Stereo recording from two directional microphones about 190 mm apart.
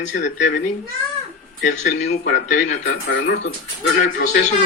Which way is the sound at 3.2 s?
60° left (ahead or behind).